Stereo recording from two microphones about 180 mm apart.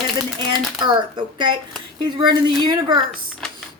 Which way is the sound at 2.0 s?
25° right (ahead or behind).